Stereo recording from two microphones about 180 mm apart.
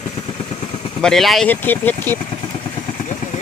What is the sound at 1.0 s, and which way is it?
Speech, centre (ahead or behind).